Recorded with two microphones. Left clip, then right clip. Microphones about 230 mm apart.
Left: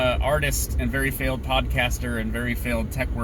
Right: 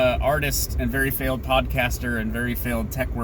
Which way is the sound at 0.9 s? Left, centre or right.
Right.